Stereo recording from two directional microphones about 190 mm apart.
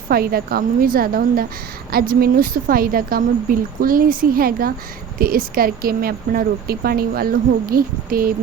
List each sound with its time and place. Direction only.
0.1 s speech: 50° right (ahead or behind)